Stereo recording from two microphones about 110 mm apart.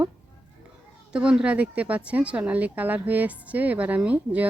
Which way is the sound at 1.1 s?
10° right (ahead or behind).